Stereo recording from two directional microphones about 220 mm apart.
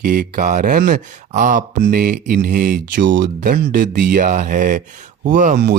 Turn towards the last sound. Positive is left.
turn(degrees=-40)  # may be behind; listen again after turning